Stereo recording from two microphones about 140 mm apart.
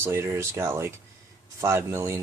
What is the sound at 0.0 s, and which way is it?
Speech, 15° right (ahead or behind).